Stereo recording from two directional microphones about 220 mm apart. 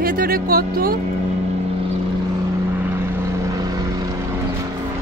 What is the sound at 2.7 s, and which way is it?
Vehicle, 10° right (ahead or behind).